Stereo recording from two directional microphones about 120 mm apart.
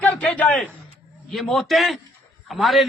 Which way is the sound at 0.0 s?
10° left (ahead or behind).